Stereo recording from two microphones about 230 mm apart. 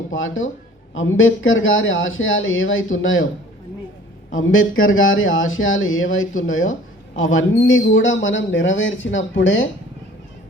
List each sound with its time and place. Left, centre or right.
0.1 s speech: left
4.3 s speech: left